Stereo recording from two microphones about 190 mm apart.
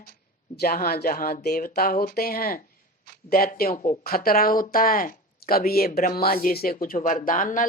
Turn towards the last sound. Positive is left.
turn(degrees=45)  # may be behind; listen again after turning